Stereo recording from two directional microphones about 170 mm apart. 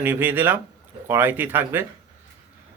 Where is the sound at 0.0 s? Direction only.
10° right (ahead or behind).